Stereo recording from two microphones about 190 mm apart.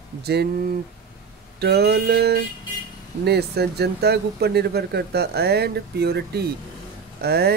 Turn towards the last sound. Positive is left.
turn(degrees=-55)  # may be behind; listen again after turning